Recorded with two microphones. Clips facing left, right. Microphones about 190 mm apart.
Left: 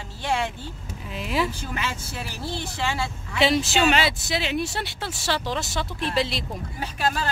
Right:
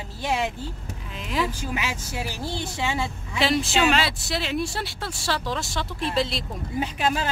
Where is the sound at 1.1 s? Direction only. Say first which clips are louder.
Left 1 dB; 5° left (ahead or behind).